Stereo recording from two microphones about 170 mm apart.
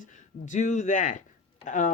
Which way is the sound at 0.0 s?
50° left (ahead or behind).